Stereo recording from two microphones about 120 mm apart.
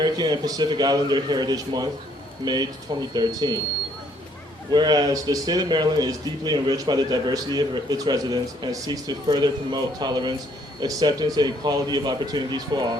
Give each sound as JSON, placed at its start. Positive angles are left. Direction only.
{"t": 0.0, "sound": "speech", "side_deg": -35}
{"t": 4.7, "sound": "speech", "side_deg": -35}